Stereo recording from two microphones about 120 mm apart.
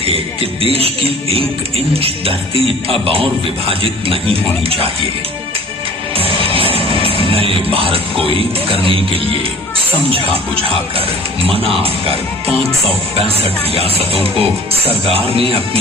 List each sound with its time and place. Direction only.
0.6 s speech: 55° right (ahead or behind)
6.1 s music: 50° right (ahead or behind)
10.1 s speech: 50° right (ahead or behind)
13.7 s speech: 55° right (ahead or behind)